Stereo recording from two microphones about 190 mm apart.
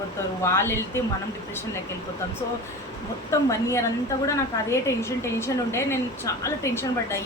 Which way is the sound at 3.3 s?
15° left (ahead or behind).